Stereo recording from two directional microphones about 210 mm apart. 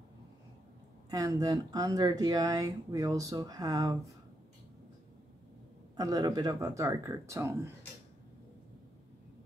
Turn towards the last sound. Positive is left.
turn(degrees=-15)  # may be behind; listen again after turning